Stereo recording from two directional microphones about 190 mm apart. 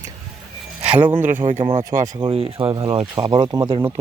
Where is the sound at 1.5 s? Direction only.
40° right (ahead or behind).